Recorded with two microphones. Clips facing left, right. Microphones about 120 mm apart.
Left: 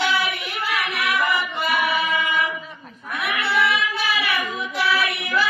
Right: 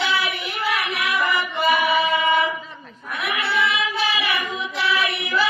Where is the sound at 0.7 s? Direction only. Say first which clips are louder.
Even; centre (ahead or behind).